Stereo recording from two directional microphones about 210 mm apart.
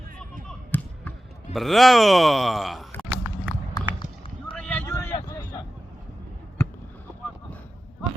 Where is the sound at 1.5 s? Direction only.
Centre (ahead or behind).